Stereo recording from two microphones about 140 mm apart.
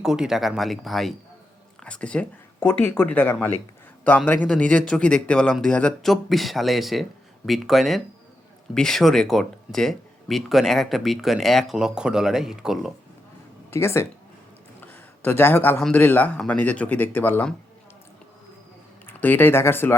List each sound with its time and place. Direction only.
0.0 s speech: 5° right (ahead or behind)
13.7 s speech: 20° left (ahead or behind)
14.8 s a sound: 15° left (ahead or behind)
15.8 s speech: 10° left (ahead or behind)
19.0 s speech: 15° left (ahead or behind)